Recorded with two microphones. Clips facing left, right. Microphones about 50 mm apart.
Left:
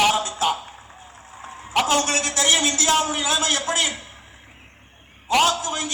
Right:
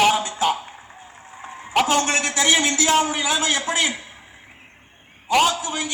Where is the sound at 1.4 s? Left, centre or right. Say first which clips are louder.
Right 2 dB; right.